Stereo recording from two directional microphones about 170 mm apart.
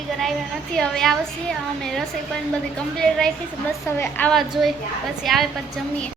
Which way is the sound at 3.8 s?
15° left (ahead or behind).